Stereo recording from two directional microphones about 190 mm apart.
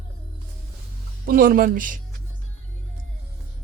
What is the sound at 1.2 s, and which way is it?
Speech, 50° right (ahead or behind).